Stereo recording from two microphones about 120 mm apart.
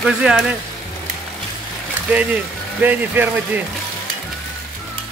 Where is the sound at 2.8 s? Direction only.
15° right (ahead or behind).